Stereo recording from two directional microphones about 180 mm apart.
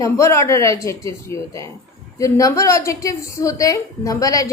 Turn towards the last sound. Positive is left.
turn(degrees=20)  # may be behind; listen again after turning